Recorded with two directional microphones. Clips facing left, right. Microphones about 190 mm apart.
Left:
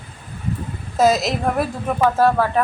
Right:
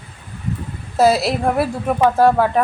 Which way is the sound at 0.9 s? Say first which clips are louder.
Right 2 dB; 10° right (ahead or behind).